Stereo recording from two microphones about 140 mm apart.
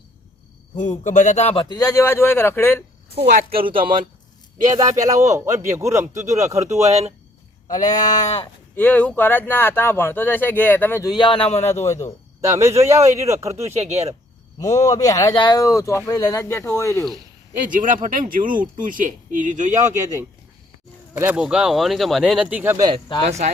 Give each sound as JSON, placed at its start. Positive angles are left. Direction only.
{"t": 0.8, "sound": "speech", "side_deg": 65}
{"t": 1.7, "sound": "speech", "side_deg": 25}
{"t": 3.7, "sound": "speech", "side_deg": -35}
{"t": 4.6, "sound": "a man's voice", "side_deg": -25}
{"t": 6.8, "sound": "speech", "side_deg": -50}
{"t": 7.8, "sound": "speech", "side_deg": 65}
{"t": 8.7, "sound": "speech", "side_deg": 10}
{"t": 11.0, "sound": "a man's voice", "side_deg": 30}
{"t": 12.4, "sound": "a man's voice", "side_deg": -20}
{"t": 13.6, "sound": "speech", "side_deg": -50}
{"t": 14.6, "sound": "speech", "side_deg": 25}
{"t": 17.7, "sound": "speech", "side_deg": -70}
{"t": 21.1, "sound": "speech", "side_deg": -20}
{"t": 21.3, "sound": "speech", "side_deg": -5}